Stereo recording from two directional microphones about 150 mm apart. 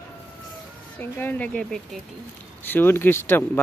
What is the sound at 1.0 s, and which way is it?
Speech, 10° left (ahead or behind).